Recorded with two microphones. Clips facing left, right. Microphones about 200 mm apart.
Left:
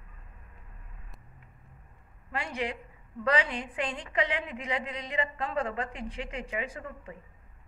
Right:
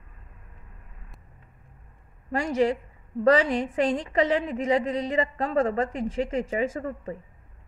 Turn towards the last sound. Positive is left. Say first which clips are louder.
# right 10 dB
turn(degrees=-40)  # may be behind; listen again after turning